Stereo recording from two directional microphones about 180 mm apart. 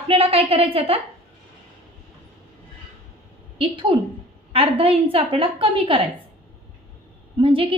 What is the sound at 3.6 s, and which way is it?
A woman's voice, 30° right (ahead or behind).